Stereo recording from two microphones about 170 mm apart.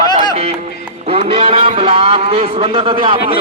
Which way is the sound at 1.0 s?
35° right (ahead or behind).